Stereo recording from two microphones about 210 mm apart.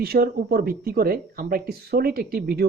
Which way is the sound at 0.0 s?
50° right (ahead or behind).